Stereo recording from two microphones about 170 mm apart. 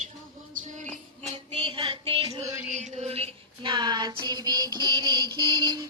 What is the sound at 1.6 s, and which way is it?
Music, 30° right (ahead or behind).